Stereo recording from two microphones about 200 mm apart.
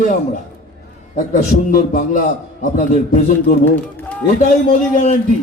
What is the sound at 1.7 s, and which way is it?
A man's voice, 45° left (ahead or behind).